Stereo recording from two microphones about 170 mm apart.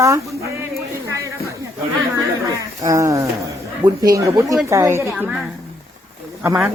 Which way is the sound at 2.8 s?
20° right (ahead or behind).